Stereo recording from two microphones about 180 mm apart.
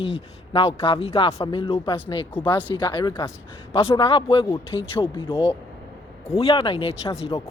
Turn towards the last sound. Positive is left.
turn(degrees=30)  # may be behind; listen again after turning